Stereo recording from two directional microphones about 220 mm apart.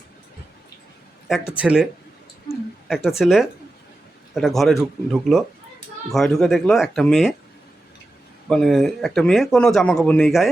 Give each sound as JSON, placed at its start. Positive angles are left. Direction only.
{"t": 1.3, "sound": "speech", "side_deg": -5}
{"t": 8.4, "sound": "speech", "side_deg": 0}